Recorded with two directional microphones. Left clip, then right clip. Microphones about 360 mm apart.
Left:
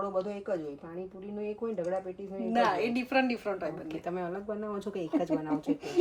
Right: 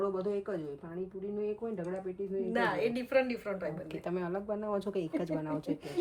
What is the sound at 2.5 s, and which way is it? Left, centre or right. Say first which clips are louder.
A woman's voice: left 5 dB; centre.